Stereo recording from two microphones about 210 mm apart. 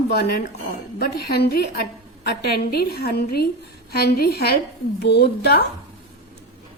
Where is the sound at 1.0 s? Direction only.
50° left (ahead or behind).